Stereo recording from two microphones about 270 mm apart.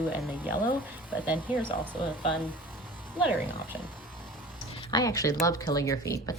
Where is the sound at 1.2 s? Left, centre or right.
Centre.